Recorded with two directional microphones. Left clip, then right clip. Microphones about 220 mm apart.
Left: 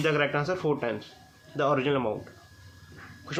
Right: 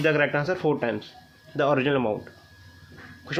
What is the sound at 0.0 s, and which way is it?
Speech, 25° right (ahead or behind).